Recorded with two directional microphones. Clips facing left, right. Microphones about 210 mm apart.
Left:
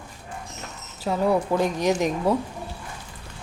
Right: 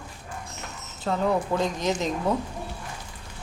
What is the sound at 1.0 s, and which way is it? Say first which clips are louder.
Speech: left 3 dB; 10° left (ahead or behind).